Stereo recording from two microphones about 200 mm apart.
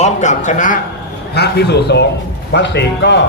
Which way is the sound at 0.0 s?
40° left (ahead or behind).